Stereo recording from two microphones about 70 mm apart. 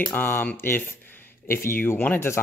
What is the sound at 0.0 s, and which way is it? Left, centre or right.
Speech, left.